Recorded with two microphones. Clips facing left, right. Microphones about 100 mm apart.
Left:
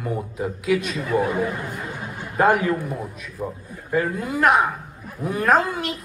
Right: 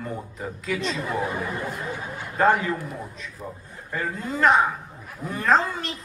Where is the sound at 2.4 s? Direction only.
10° left (ahead or behind).